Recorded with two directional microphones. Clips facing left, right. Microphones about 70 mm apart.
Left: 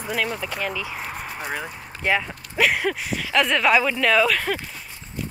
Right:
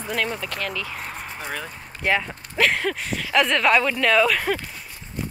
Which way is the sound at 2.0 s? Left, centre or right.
Centre.